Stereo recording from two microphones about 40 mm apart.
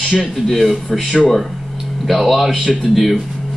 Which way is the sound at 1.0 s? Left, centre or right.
Centre.